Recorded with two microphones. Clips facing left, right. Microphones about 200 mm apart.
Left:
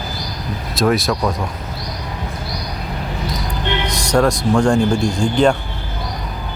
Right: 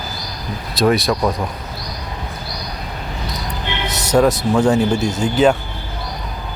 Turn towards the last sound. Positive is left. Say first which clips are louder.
# even
turn(degrees=-5)  # may be behind; listen again after turning